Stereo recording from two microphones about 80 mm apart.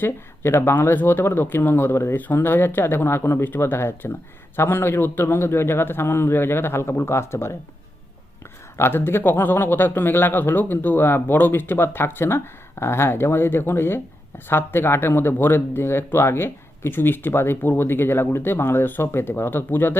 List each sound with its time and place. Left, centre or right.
0.0 s speech: left
8.8 s speech: left